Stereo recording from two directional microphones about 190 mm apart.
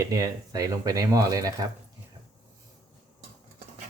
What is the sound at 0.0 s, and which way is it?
Speech, 15° right (ahead or behind).